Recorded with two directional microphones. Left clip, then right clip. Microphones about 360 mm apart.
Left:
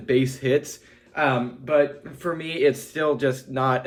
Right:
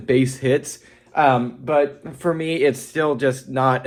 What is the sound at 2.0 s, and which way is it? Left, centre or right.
Speech, centre.